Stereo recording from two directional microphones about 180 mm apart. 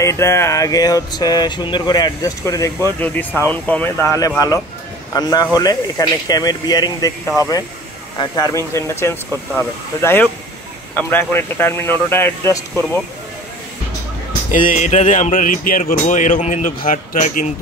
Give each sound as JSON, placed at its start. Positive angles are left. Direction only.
{"t": 0.0, "sound": "speech", "side_deg": 15}
{"t": 14.5, "sound": "speech", "side_deg": 45}